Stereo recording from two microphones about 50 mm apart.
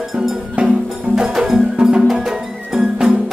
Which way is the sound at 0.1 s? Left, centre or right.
Centre.